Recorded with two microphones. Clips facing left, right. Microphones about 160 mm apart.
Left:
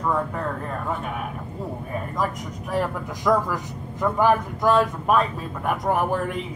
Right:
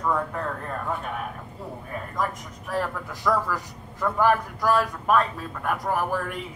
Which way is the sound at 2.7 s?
15° left (ahead or behind).